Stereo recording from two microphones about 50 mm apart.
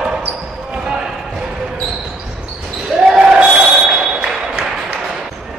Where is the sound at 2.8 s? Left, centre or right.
Centre.